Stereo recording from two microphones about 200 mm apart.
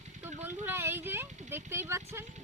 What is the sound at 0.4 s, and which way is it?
Speech, 10° right (ahead or behind).